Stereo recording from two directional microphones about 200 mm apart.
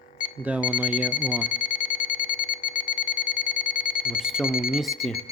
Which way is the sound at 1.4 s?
40° left (ahead or behind).